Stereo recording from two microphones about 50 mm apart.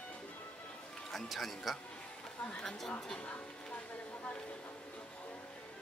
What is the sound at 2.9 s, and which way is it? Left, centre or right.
Speech, centre.